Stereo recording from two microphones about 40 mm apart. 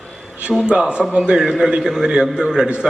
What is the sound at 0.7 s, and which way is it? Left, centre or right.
Speech, right.